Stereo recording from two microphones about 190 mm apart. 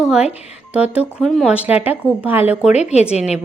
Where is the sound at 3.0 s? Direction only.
5° right (ahead or behind).